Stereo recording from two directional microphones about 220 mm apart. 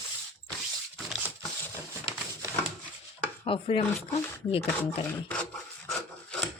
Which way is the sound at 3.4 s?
25° left (ahead or behind).